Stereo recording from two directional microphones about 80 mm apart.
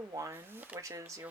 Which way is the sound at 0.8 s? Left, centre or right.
Right.